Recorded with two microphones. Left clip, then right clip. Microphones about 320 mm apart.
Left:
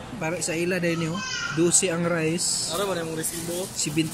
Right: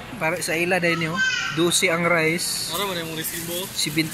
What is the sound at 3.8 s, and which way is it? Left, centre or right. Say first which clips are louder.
Speech: right 4 dB; centre.